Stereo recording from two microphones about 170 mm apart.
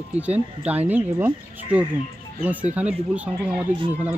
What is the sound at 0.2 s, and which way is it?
Speech, 10° right (ahead or behind).